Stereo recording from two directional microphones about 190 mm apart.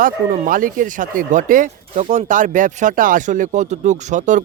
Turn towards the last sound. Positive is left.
turn(degrees=-40)  # may be behind; listen again after turning